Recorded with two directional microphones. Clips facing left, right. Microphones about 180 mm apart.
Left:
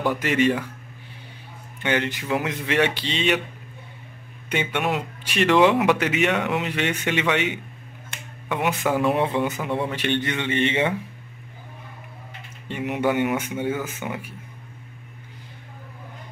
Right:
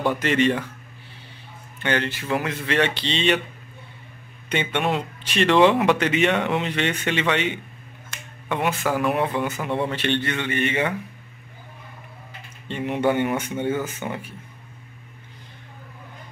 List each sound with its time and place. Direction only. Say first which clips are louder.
0.1 s a man's voice: even; 10° left (ahead or behind)
1.8 s a man's voice: even; 15° left (ahead or behind)
4.5 s a man's voice: right 1 dB; 5° left (ahead or behind); by 9.6 s 20° left (ahead or behind)
9.8 s a man's voice: right 2 dB; 10° left (ahead or behind)
12.6 s speech: right 1 dB; 5° left (ahead or behind)